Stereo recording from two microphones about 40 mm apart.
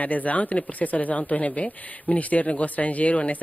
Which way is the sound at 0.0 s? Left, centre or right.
Left.